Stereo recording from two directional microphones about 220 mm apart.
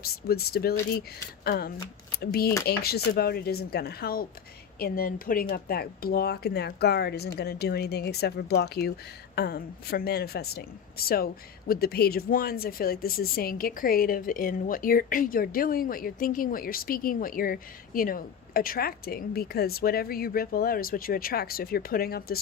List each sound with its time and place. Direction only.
0.0 s speech: 45° left (ahead or behind)